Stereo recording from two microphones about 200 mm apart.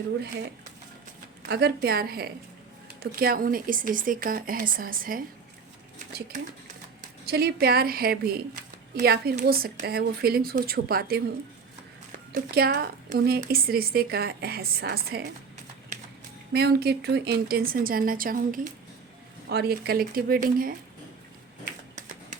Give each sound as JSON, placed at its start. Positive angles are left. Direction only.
{"t": 0.2, "sound": "speech", "side_deg": -55}
{"t": 7.0, "sound": "speech", "side_deg": -50}
{"t": 12.3, "sound": "speech", "side_deg": -50}
{"t": 16.5, "sound": "speech", "side_deg": -55}
{"t": 19.5, "sound": "speech", "side_deg": -55}
{"t": 21.6, "sound": "a sound", "side_deg": -40}